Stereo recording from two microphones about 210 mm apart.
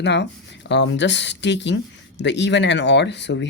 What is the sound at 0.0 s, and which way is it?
Speech, 55° left (ahead or behind).